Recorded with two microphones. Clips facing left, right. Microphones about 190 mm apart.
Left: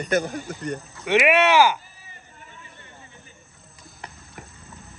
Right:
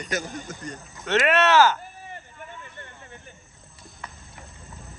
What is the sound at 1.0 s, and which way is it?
Speech, 10° left (ahead or behind).